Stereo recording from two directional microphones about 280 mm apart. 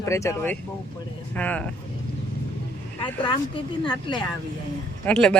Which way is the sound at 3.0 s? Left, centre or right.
Centre.